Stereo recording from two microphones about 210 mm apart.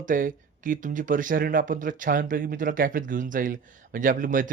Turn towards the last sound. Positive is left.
turn(degrees=-40)  # may be behind; listen again after turning